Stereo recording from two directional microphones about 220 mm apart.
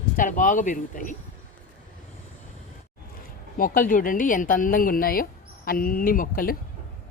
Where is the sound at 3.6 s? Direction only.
40° left (ahead or behind).